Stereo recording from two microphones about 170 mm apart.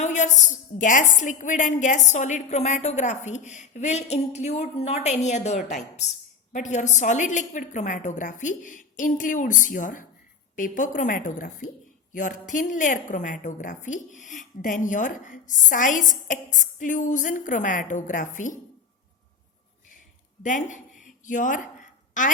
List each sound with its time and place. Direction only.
0.0 s a woman's voice: 45° left (ahead or behind)
20.4 s a woman's voice: 45° left (ahead or behind)
21.2 s a sound: 50° left (ahead or behind)